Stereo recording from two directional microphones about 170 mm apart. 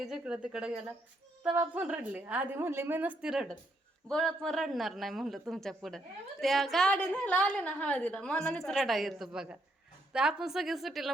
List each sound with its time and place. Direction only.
0.0 s a woman's voice: 5° right (ahead or behind)